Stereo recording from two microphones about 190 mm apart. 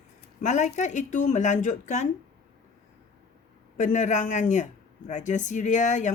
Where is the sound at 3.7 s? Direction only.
40° left (ahead or behind).